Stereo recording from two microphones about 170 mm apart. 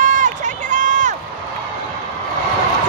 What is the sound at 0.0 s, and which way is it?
Run, 45° right (ahead or behind).